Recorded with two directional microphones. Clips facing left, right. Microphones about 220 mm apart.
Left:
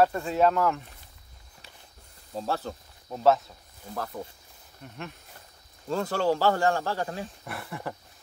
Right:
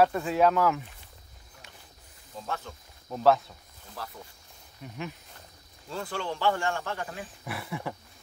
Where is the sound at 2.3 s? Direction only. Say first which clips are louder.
Left 6 dB; 35° left (ahead or behind).